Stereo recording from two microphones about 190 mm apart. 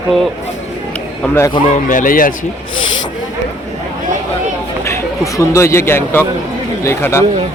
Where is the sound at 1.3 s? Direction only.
20° left (ahead or behind).